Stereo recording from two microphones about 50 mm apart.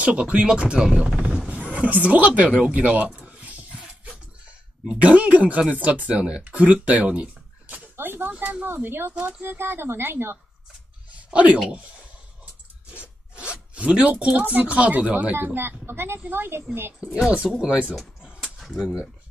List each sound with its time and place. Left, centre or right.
0.0 s speech: right
1.5 s speech: right
3.2 s a sound: right
4.8 s speech: right
7.6 s a sound: right
8.3 s speech: right
8.6 s speech: right
11.2 s speech: right
13.0 s zipper: right
14.3 s speech: right
15.5 s speech: right
17.4 s speech: centre
18.7 s speech: centre